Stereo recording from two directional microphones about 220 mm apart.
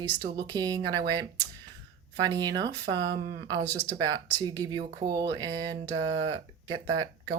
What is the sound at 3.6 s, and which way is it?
Speech, 10° left (ahead or behind).